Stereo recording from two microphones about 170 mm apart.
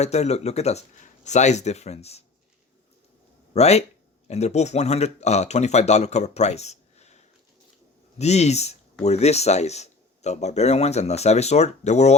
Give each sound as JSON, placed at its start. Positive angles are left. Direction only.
{"t": 0.0, "sound": "speech", "side_deg": 40}
{"t": 3.5, "sound": "speech", "side_deg": 40}
{"t": 8.2, "sound": "speech", "side_deg": 40}